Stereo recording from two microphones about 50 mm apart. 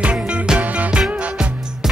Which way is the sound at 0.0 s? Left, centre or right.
Right.